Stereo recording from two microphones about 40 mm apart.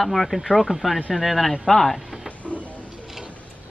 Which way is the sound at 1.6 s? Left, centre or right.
Centre.